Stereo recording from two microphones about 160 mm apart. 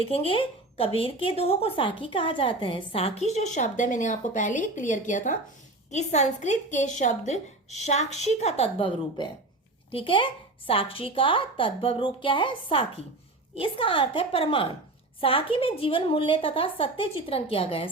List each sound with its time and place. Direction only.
0.0 s a woman's voice: 35° left (ahead or behind)